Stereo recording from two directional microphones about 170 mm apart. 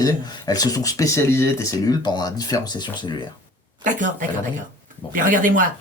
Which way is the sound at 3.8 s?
50° right (ahead or behind).